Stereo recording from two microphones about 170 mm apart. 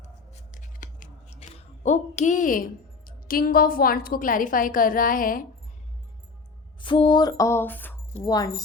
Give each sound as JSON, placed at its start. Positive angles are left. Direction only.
{"t": 0.5, "sound": "scissors", "side_deg": 50}
{"t": 1.4, "sound": "a woman's voice", "side_deg": 40}
{"t": 6.7, "sound": "music", "side_deg": 30}
{"t": 8.2, "sound": "music", "side_deg": 20}